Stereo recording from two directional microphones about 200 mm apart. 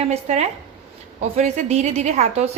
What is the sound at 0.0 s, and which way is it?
A woman's voice, 35° right (ahead or behind).